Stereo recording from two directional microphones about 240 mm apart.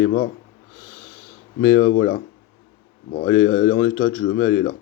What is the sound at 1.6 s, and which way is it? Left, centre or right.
Speech, left.